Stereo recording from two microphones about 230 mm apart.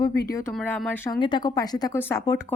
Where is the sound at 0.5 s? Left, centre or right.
Centre.